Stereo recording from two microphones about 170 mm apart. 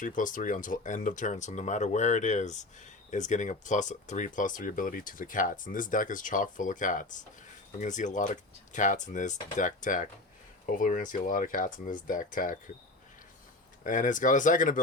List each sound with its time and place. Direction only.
0.2 s speech: 50° left (ahead or behind)
13.8 s speech: 50° left (ahead or behind)